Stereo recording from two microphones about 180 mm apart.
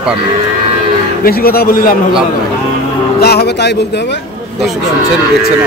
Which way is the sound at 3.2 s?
65° left (ahead or behind).